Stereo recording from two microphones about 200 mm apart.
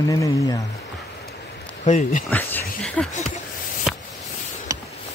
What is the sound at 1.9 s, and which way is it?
Speech, 35° left (ahead or behind).